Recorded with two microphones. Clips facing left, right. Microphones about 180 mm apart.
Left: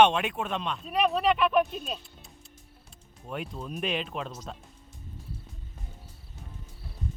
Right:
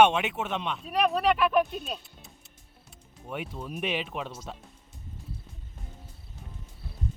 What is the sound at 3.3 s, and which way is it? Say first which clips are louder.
Speech: even; 5° right (ahead or behind).